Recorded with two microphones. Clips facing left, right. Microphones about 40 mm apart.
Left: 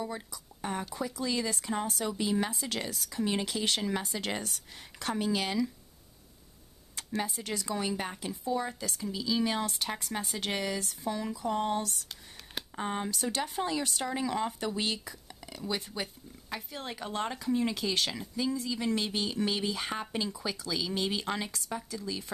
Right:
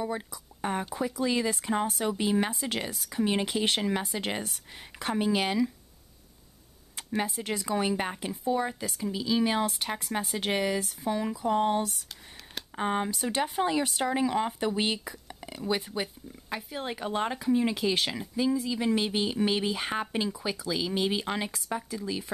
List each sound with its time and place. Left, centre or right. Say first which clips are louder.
0.0 s speech: right 5 dB; right
7.0 s speech: right 3 dB; centre